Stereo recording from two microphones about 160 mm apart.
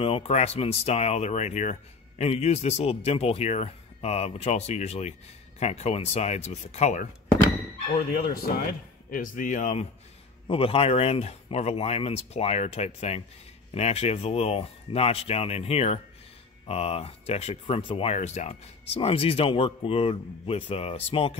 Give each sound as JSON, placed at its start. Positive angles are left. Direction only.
{"t": 0.0, "sound": "speech", "side_deg": 35}
{"t": 8.3, "sound": "speech", "side_deg": 65}
{"t": 10.4, "sound": "speech", "side_deg": 35}